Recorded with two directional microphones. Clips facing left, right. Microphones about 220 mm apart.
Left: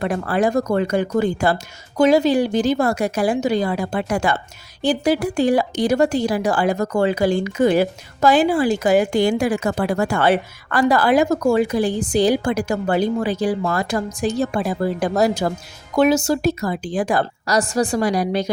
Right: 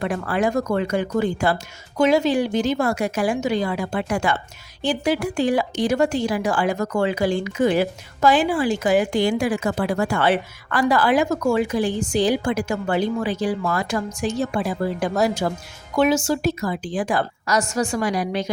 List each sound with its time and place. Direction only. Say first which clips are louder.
0.0 s speech: left 3 dB; 40° left (ahead or behind)